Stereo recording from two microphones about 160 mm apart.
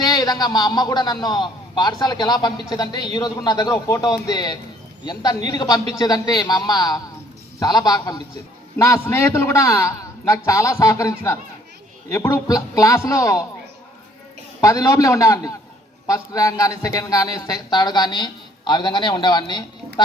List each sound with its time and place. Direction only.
0.0 s a man's voice: 25° left (ahead or behind)
14.6 s a man's voice: 20° left (ahead or behind)